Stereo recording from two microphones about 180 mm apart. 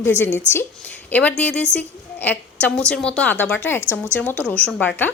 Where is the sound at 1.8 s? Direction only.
10° left (ahead or behind).